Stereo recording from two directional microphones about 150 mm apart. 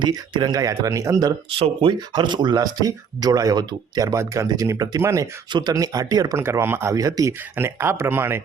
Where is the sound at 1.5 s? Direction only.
35° right (ahead or behind); by 8.4 s 15° right (ahead or behind).